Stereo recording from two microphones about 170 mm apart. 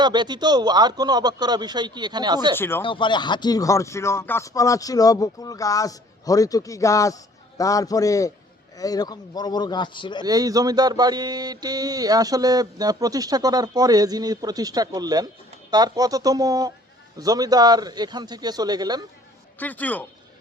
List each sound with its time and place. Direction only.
0.0 s speech: 25° right (ahead or behind)
2.6 s a man's voice: 15° left (ahead or behind)
2.8 s speech: 30° left (ahead or behind)
10.2 s speech: 20° right (ahead or behind)
19.5 s a man's voice: 10° left (ahead or behind)